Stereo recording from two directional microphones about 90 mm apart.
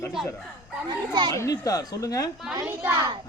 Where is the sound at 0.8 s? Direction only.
55° right (ahead or behind).